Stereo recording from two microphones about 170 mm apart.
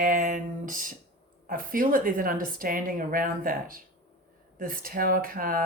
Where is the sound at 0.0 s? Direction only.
50° right (ahead or behind).